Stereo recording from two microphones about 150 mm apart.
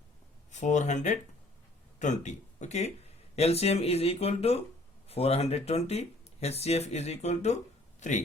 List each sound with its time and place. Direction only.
0.5 s speech: 55° left (ahead or behind)